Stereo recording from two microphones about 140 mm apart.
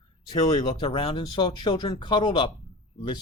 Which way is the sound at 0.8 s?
45° left (ahead or behind).